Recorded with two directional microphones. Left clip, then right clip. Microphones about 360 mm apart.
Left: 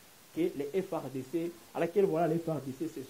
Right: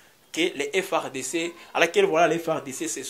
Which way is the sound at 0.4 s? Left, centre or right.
Centre.